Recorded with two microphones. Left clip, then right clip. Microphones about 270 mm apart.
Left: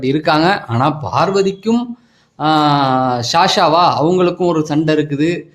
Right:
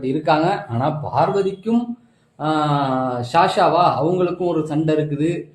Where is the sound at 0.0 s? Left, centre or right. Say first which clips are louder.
Left 4 dB; left.